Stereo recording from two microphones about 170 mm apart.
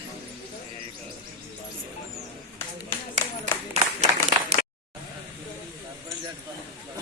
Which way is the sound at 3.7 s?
40° right (ahead or behind).